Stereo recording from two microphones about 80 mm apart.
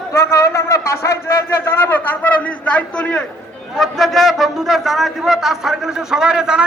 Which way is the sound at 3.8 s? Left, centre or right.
Centre.